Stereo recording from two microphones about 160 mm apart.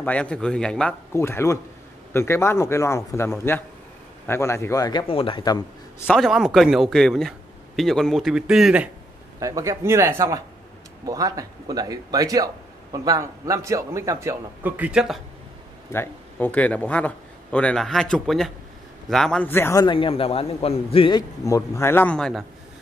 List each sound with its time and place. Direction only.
0.0 s a man's voice: 5° left (ahead or behind)
1.1 s a man's voice: 15° left (ahead or behind)
5.0 s a man's voice: 35° left (ahead or behind)
6.0 s a man's voice: centre (ahead or behind)
9.4 s a man's voice: 20° right (ahead or behind); by 15.1 s 5° right (ahead or behind)
15.9 s a man's voice: 15° left (ahead or behind)
19.9 s a man's voice: 35° left (ahead or behind)
21.5 s a man's voice: 20° left (ahead or behind)